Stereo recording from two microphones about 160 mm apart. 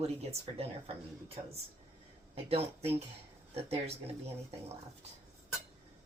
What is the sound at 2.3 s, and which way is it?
Speech, 40° right (ahead or behind).